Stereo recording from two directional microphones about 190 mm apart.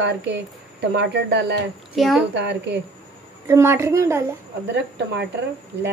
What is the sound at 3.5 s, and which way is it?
Speech, 15° right (ahead or behind).